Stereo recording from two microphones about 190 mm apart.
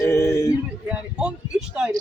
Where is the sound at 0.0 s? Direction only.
15° left (ahead or behind).